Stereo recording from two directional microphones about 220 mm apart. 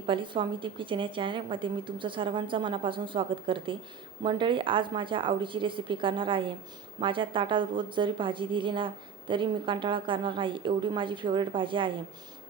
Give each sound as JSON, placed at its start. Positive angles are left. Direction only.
{"t": 0.1, "sound": "a woman's voice", "side_deg": -20}